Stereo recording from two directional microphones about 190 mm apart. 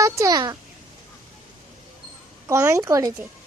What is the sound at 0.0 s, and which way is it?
Speech, 20° right (ahead or behind).